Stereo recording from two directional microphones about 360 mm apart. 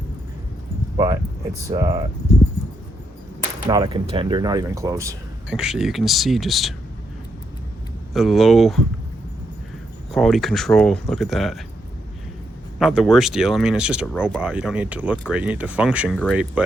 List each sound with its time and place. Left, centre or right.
0.9 s speech: centre
3.7 s speech: centre
8.1 s speech: centre
10.1 s speech: centre
12.8 s speech: centre